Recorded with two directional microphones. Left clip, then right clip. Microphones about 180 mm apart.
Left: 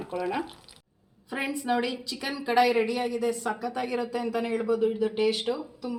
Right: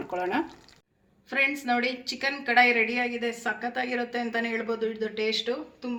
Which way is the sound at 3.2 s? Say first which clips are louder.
Left 1 dB; 25° left (ahead or behind).